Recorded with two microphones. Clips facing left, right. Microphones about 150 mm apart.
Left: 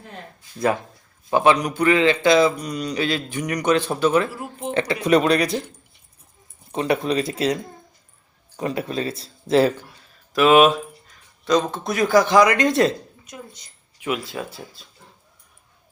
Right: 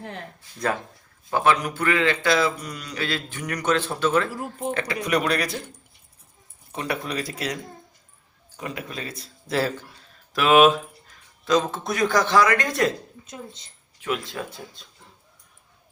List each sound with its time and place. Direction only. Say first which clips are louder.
1.3 s a man's voice: left 4 dB; 20° left (ahead or behind)
4.7 s a man's voice: left 7 dB; 25° left (ahead or behind)
6.7 s a man's voice: left 8 dB; 25° left (ahead or behind)
10.3 s speech: left 2 dB; centre (ahead or behind); by 12.9 s 25° left (ahead or behind)
13.2 s a woman's voice: even; 25° right (ahead or behind)
14.0 s speech: left 2 dB; 10° left (ahead or behind)